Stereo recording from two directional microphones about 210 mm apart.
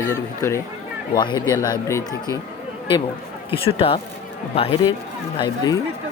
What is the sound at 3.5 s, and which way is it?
Speech, 25° left (ahead or behind).